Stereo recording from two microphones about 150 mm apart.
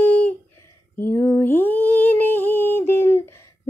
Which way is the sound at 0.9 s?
15° left (ahead or behind).